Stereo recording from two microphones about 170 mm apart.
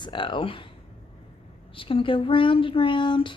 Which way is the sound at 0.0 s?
30° left (ahead or behind).